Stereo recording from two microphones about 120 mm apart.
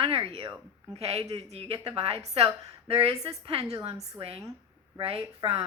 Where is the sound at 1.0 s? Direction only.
60° right (ahead or behind).